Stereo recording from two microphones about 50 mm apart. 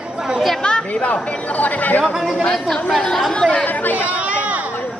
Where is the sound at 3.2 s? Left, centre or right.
Centre.